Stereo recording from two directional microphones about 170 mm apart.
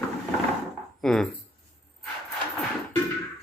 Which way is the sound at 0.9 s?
5° left (ahead or behind).